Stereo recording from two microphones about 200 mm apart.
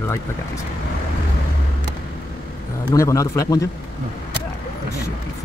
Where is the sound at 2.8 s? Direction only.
15° left (ahead or behind).